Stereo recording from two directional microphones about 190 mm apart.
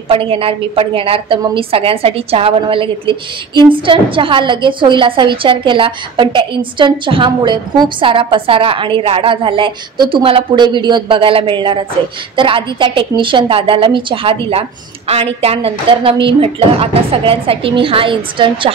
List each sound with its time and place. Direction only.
0.1 s a woman's voice: 30° right (ahead or behind)